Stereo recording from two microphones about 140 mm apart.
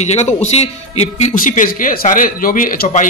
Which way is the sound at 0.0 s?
55° left (ahead or behind).